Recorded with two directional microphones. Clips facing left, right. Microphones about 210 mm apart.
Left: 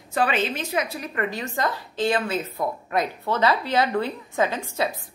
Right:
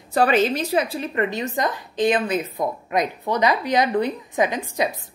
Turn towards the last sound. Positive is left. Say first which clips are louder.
# right 2 dB
turn(degrees=-15)  # may be behind; listen again after turning